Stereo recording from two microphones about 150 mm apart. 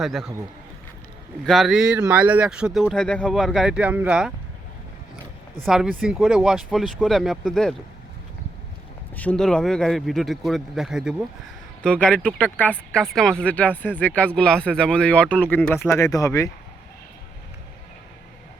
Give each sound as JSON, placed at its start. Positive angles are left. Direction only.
{"t": 0.0, "sound": "speech", "side_deg": 0}
{"t": 1.5, "sound": "speech", "side_deg": 0}
{"t": 5.6, "sound": "speech", "side_deg": -5}
{"t": 9.1, "sound": "speech", "side_deg": 10}